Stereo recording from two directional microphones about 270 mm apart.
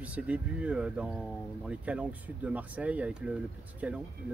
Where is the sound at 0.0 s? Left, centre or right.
Centre.